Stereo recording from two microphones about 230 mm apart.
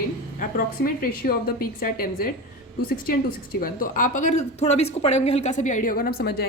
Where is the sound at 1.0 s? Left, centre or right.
Left.